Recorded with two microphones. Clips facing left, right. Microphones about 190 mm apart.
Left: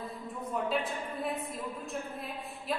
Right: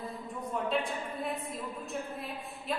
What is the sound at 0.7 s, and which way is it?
Speech, centre (ahead or behind).